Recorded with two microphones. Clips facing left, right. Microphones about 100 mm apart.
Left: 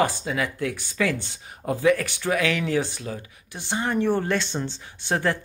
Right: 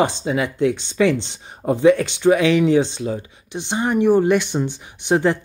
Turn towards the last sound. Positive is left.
turn(degrees=-20)  # may be behind; listen again after turning